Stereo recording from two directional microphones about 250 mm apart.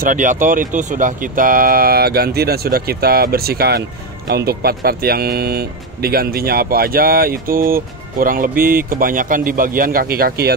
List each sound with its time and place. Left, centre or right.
0.0 s speech: right